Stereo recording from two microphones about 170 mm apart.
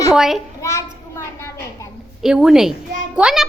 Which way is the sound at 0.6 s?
15° left (ahead or behind).